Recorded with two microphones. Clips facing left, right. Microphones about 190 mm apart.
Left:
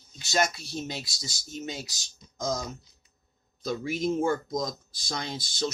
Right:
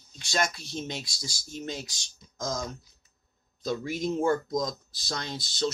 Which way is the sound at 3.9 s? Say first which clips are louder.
Even; 15° left (ahead or behind).